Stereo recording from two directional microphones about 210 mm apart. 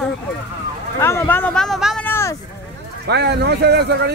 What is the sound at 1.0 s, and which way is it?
Speech, 10° left (ahead or behind).